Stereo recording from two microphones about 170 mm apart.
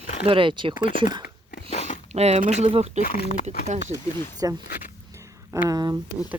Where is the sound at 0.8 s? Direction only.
55° left (ahead or behind).